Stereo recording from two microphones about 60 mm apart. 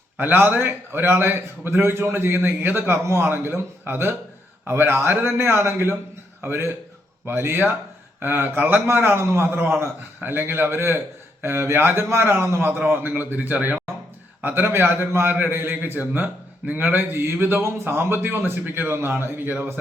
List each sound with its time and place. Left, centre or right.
0.2 s a man's voice: right
14.4 s a man's voice: right